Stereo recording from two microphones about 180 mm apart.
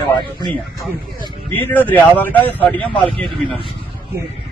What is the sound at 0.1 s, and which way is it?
Speech, 25° left (ahead or behind).